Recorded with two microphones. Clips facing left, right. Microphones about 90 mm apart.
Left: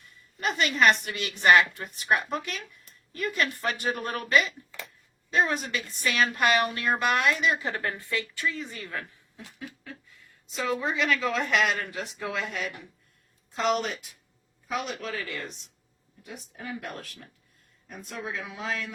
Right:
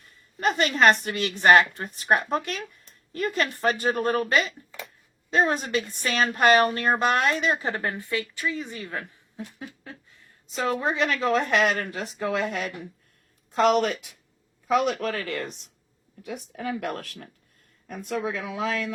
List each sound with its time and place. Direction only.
0.3 s a woman's voice: 35° right (ahead or behind)
10.4 s a woman's voice: 40° right (ahead or behind)
13.7 s speech: 90° right
14.7 s speech: 65° right (ahead or behind); by 15.7 s 50° right (ahead or behind)
16.2 s speech: 85° right; by 17.2 s 55° right (ahead or behind)
17.8 s speech: 90° right